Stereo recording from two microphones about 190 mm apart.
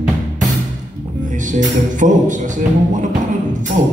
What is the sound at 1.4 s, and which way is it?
Music, 40° right (ahead or behind).